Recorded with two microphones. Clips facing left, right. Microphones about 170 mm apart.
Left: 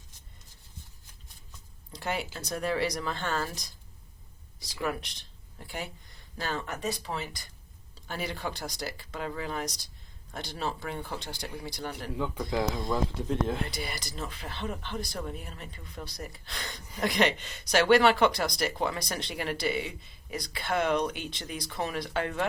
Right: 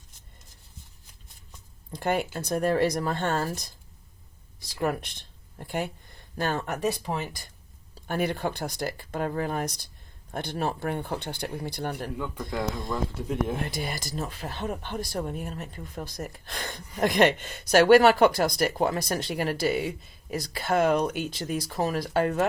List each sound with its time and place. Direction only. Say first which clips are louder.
1.9 s speech: right 7 dB; 55° right (ahead or behind)
12.1 s speech: left 1 dB; 10° left (ahead or behind); by 13.6 s 10° right (ahead or behind)
13.7 s speech: right 4 dB; 45° right (ahead or behind)